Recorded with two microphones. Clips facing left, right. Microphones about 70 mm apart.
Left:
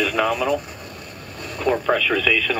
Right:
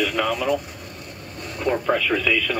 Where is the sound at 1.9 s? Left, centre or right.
Right.